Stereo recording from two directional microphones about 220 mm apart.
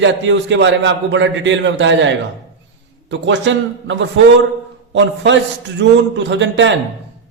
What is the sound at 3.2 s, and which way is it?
A man's voice, 55° right (ahead or behind).